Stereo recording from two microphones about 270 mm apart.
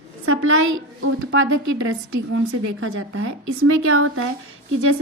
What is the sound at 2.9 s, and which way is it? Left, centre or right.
A woman's voice, right.